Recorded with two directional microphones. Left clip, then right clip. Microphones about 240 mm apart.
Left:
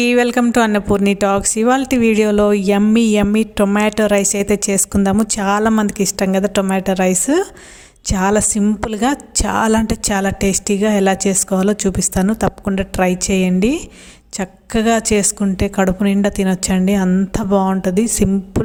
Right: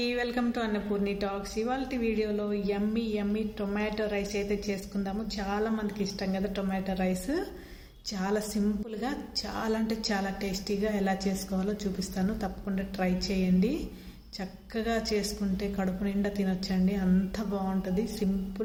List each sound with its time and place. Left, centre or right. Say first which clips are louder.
0.0 s speech: left 16 dB; left